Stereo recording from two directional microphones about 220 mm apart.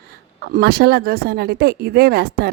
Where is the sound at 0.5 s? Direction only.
45° right (ahead or behind).